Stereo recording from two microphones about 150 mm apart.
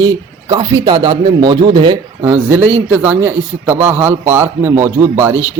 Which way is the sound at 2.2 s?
15° right (ahead or behind).